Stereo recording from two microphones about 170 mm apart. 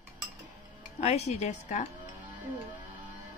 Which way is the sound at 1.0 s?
40° left (ahead or behind).